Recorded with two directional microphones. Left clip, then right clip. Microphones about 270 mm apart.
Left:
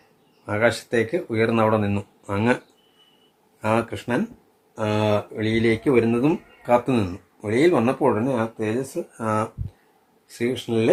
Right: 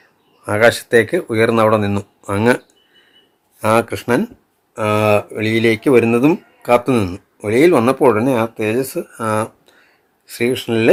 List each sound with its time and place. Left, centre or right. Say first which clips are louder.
0.4 s speech: right 8 dB; right
3.6 s speech: right 8 dB; right